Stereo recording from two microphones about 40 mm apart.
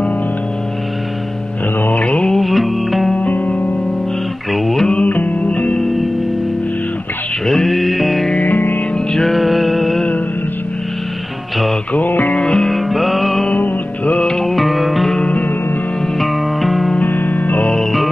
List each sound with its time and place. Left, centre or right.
2.3 s music: centre
3.2 s music: left
4.5 s a sound: centre
5.5 s music: left
5.8 s music: centre
7.4 s music: centre
8.4 s music: left
9.1 s music: centre
12.3 s music: left
12.7 s music: centre
13.6 s music: left
14.4 s music: centre
16.2 s music: centre
17.0 s music: left